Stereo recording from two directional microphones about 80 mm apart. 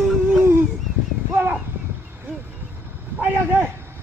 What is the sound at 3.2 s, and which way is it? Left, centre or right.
Speech, centre.